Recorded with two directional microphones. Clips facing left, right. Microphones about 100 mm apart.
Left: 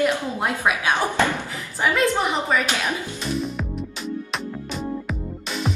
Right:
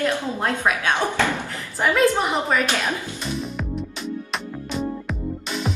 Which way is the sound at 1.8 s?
Centre (ahead or behind).